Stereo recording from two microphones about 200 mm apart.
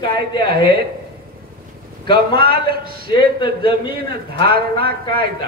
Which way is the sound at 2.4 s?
50° right (ahead or behind).